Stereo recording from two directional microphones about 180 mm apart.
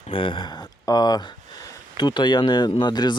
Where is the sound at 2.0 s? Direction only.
25° left (ahead or behind).